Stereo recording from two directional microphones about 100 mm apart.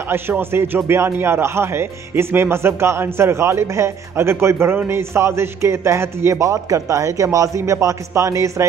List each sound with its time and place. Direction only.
0.1 s speech: 25° right (ahead or behind)